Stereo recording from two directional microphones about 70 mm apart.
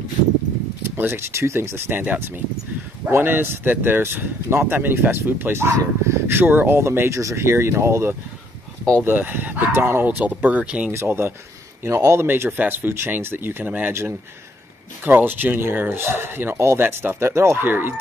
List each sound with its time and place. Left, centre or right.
0.8 s speech: right
7.1 s speech: right; by 10.9 s centre
10.9 s speech: right
11.8 s speech: right
12.3 s speech: right
15.0 s speech: right